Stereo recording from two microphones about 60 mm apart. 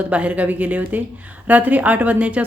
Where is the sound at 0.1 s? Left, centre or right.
Right.